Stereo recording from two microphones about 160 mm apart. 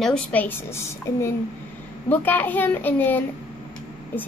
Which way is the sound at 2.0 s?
10° left (ahead or behind).